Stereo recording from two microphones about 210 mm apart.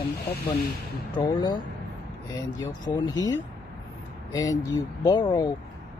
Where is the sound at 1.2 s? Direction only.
20° left (ahead or behind).